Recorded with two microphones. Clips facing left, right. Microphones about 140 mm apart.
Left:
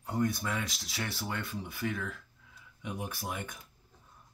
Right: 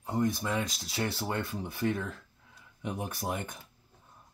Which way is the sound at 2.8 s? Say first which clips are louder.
Right 3 dB; 45° right (ahead or behind).